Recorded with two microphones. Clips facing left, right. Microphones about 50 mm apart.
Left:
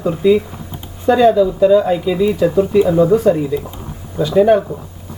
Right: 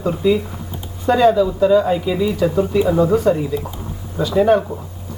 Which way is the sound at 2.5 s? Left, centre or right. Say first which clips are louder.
Left 4 dB; left.